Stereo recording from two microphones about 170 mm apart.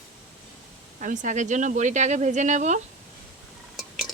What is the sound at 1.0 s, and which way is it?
Speech, 50° right (ahead or behind).